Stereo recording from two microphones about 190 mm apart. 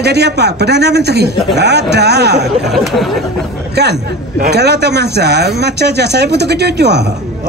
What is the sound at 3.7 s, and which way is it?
A man's voice, 60° right (ahead or behind).